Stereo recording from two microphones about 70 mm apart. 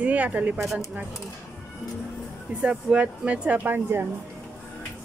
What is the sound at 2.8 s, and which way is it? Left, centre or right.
Speech, centre.